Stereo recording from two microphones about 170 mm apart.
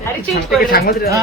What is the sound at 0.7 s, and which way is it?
Speech, 65° left (ahead or behind).